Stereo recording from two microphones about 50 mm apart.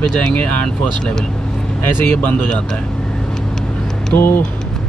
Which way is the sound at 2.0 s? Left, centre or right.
Left.